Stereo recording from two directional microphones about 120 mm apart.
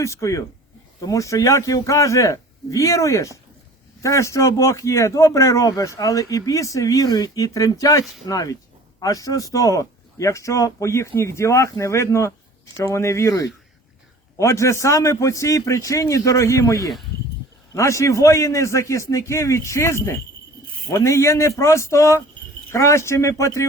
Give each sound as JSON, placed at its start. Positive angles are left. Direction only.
{"t": 0.0, "sound": "speech", "side_deg": 25}